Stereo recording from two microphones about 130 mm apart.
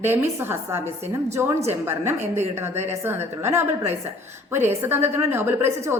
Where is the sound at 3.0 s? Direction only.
20° right (ahead or behind).